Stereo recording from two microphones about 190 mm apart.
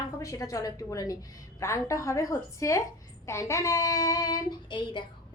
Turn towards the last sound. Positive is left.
turn(degrees=25)  # may be behind; listen again after turning